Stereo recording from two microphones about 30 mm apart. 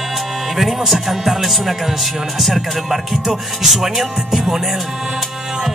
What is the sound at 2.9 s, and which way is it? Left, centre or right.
Music, centre.